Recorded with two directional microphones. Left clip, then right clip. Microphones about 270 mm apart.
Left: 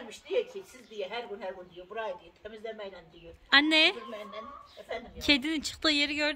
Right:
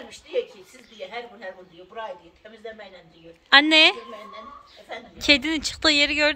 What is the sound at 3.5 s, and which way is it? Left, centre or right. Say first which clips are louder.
Speech: right 8 dB; centre.